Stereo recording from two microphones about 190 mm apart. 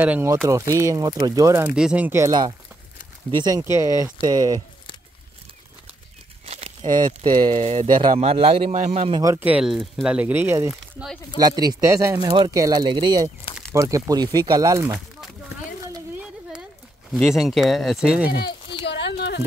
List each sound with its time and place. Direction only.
0.0 s speech: 10° right (ahead or behind)
6.4 s a man's voice: 30° right (ahead or behind)
9.2 s speech: 10° right (ahead or behind)
10.7 s speech: centre (ahead or behind)
11.3 s speech: 20° right (ahead or behind)
17.1 s speech: centre (ahead or behind)
18.4 s a sound: 25° left (ahead or behind)
18.9 s a sound: 65° left (ahead or behind)